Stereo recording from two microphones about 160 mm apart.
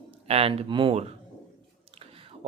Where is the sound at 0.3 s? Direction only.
35° right (ahead or behind).